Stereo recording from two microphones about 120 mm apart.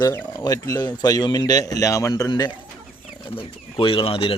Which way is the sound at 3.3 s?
50° left (ahead or behind).